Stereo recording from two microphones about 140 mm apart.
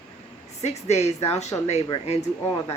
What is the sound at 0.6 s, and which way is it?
Speech, 50° left (ahead or behind).